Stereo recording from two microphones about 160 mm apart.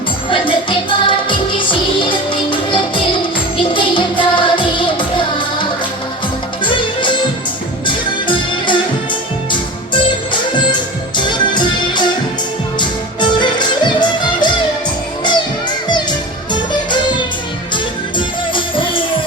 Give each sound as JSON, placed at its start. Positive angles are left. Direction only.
{"t": 0.3, "sound": "music", "side_deg": 30}
{"t": 6.7, "sound": "music", "side_deg": 30}
{"t": 10.5, "sound": "music", "side_deg": 30}
{"t": 18.5, "sound": "music", "side_deg": 30}